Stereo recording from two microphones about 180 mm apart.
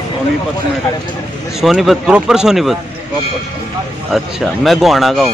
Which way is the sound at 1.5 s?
Centre (ahead or behind).